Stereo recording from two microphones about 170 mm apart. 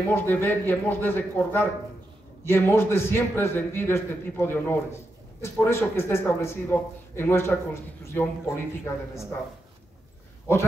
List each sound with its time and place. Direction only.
0.1 s a man's voice: 15° left (ahead or behind)